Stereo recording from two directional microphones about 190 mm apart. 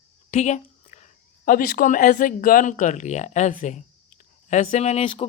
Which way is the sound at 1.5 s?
45° left (ahead or behind).